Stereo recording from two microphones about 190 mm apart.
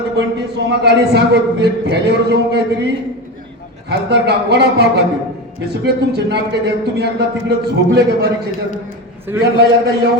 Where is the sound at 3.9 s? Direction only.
60° right (ahead or behind).